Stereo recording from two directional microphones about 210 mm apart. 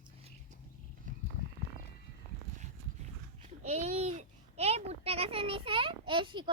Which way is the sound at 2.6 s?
35° right (ahead or behind).